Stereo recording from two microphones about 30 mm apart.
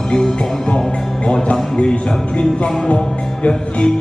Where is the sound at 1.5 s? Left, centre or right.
Left.